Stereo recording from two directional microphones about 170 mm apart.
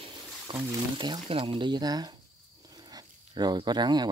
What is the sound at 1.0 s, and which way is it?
Speech, 25° right (ahead or behind).